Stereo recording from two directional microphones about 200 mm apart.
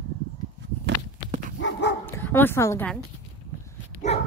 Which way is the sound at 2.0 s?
10° left (ahead or behind).